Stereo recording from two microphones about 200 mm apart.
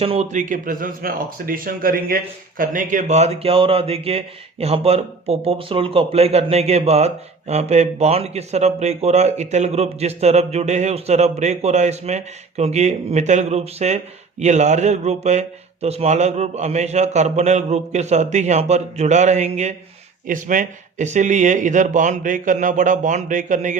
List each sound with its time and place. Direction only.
0.0 s speech: 30° right (ahead or behind)